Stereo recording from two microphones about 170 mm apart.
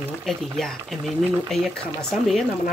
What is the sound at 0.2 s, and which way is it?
Speech, centre (ahead or behind).